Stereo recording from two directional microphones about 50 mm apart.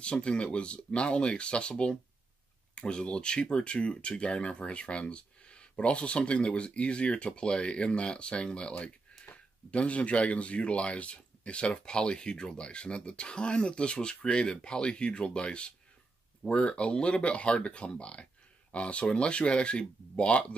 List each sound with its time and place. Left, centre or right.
0.0 s speech: left